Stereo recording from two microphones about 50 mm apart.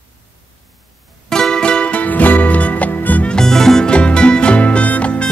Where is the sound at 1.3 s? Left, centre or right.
Centre; by 3.3 s left.